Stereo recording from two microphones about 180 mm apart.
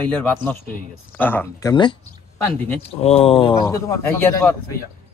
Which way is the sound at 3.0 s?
35° left (ahead or behind).